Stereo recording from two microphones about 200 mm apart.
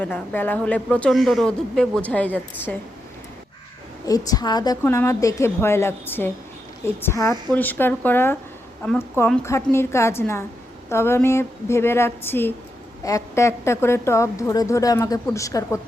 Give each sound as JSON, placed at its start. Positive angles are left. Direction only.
{"t": 0.0, "sound": "speech", "side_deg": 10}
{"t": 4.0, "sound": "speech", "side_deg": 20}